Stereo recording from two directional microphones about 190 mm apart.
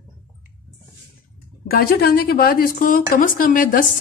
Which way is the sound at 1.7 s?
50° left (ahead or behind).